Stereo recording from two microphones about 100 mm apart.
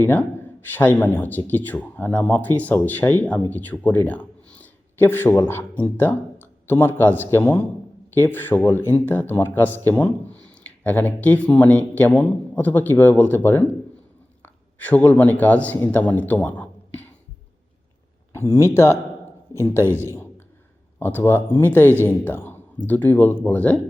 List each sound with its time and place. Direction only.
0.0 s speech: 20° left (ahead or behind)
18.3 s speech: 25° left (ahead or behind)